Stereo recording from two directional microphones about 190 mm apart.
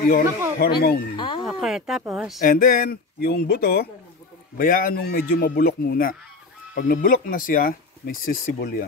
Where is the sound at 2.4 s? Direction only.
45° left (ahead or behind).